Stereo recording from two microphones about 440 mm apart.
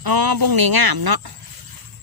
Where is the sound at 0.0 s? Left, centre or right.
Right.